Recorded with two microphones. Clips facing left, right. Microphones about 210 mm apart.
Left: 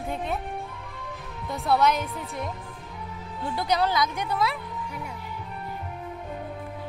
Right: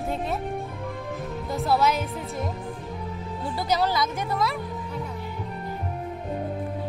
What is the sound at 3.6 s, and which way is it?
Speech, centre (ahead or behind).